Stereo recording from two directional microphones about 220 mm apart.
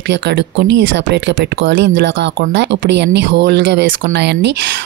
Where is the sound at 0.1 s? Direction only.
55° right (ahead or behind).